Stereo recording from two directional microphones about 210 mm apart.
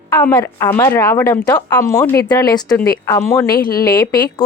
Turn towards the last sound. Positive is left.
turn(degrees=20)  # may be behind; listen again after turning